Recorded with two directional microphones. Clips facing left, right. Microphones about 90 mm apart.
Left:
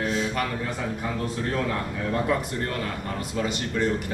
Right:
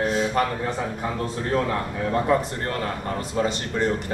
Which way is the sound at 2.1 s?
30° right (ahead or behind).